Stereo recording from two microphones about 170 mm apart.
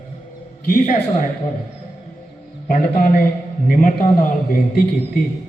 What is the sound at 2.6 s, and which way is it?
A man's voice, 55° left (ahead or behind).